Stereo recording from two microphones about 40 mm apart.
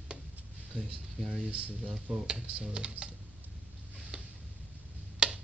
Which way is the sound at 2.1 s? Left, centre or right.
Centre.